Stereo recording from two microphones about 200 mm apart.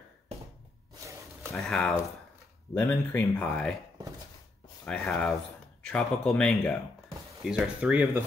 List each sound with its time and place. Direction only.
1.5 s speech: centre (ahead or behind)
4.8 s speech: 5° left (ahead or behind)